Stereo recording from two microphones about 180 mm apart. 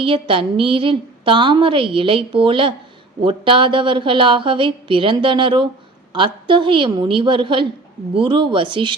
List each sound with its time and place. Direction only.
0.0 s a woman's voice: 30° right (ahead or behind)